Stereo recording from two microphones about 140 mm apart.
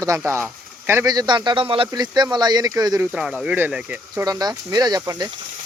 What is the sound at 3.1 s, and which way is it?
Speech, 5° right (ahead or behind).